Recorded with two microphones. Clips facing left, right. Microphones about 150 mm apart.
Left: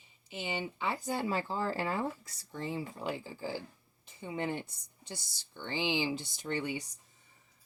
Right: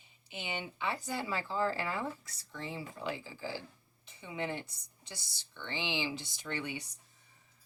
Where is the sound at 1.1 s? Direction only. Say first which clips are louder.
Left 3 dB; 50° left (ahead or behind).